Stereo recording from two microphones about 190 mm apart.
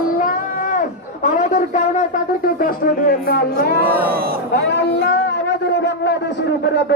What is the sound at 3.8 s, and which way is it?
Speech, 10° right (ahead or behind).